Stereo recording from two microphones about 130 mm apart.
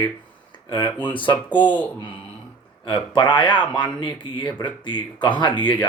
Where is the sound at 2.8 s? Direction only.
35° left (ahead or behind).